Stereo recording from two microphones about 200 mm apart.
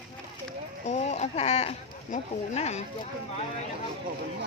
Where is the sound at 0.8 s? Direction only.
35° left (ahead or behind).